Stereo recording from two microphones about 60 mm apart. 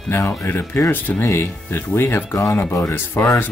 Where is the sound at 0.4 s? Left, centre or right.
Left.